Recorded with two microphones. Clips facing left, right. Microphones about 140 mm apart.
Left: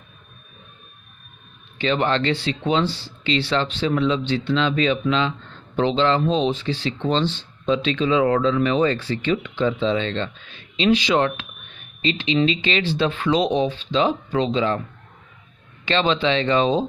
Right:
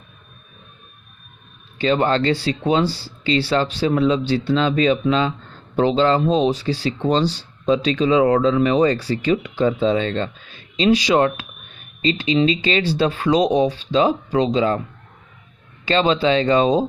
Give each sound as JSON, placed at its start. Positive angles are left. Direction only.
{"t": 1.8, "sound": "speech", "side_deg": -35}
{"t": 15.8, "sound": "speech", "side_deg": -35}